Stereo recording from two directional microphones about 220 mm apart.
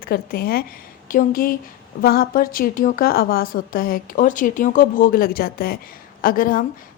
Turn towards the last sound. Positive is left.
turn(degrees=40)  # may be behind; listen again after turning